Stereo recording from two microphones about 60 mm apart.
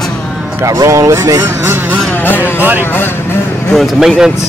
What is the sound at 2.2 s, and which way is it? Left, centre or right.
Speech, left.